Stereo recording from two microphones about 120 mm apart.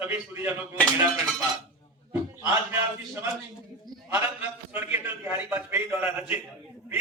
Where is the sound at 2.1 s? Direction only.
20° right (ahead or behind).